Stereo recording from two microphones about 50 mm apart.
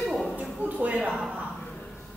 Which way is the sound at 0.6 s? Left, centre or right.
Right.